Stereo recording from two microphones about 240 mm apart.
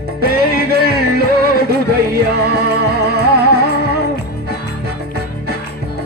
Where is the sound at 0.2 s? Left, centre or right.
Right.